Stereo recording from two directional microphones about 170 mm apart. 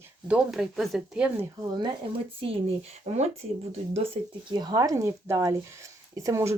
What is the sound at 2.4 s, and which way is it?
Speech, 35° right (ahead or behind).